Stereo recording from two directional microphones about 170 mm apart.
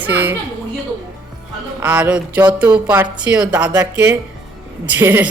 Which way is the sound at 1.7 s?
10° right (ahead or behind).